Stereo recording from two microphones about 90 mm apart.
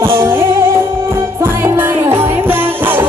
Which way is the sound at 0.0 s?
25° right (ahead or behind).